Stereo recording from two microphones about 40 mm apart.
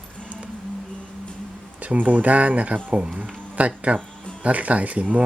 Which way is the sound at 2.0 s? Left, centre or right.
Right.